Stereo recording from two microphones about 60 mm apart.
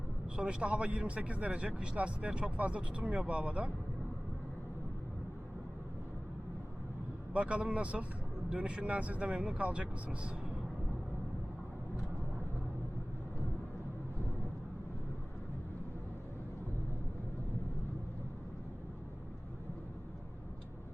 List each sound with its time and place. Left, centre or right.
0.3 s speech: centre
7.3 s speech: centre